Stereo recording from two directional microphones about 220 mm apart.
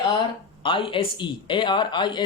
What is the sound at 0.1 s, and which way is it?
Speech, 20° left (ahead or behind).